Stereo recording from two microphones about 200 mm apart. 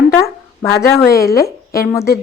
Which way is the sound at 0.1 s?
15° left (ahead or behind).